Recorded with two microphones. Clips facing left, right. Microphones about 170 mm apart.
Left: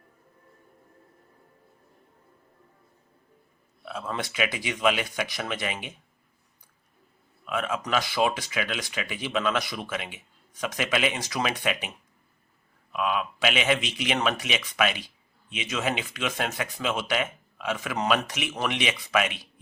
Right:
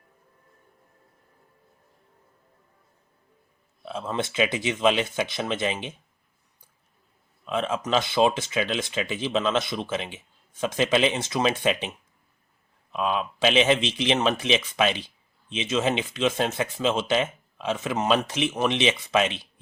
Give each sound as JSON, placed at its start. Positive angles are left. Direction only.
{"t": 3.8, "sound": "speech", "side_deg": -25}
{"t": 7.4, "sound": "speech", "side_deg": -25}